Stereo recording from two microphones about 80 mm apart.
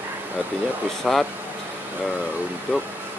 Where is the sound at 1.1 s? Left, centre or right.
Centre.